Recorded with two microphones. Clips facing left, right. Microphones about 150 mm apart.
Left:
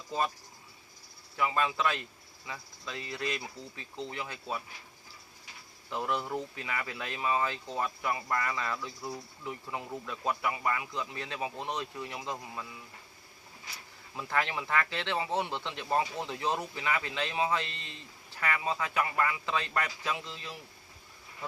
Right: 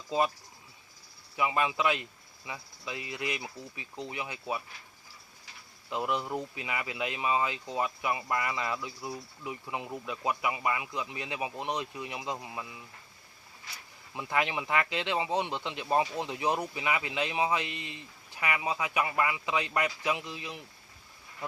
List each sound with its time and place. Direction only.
1.4 s speech: 15° right (ahead or behind)
5.9 s speech: 15° right (ahead or behind)
14.2 s speech: 15° right (ahead or behind)